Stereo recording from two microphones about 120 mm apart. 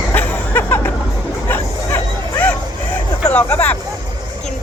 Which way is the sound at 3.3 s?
15° left (ahead or behind).